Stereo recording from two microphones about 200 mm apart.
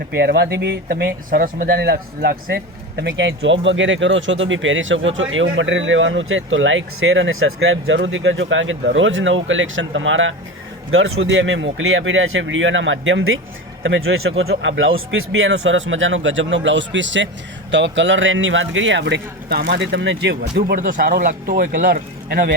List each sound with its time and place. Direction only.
0.1 s speech: 55° right (ahead or behind)
3.0 s a man's voice: 65° right (ahead or behind); by 14.5 s 85° right
14.5 s a man's voice: 70° right (ahead or behind); by 22.5 s 45° right (ahead or behind)